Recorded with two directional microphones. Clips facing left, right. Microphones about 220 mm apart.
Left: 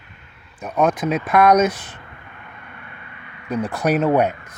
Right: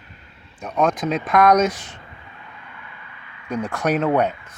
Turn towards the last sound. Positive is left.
turn(degrees=10)  # may be behind; listen again after turning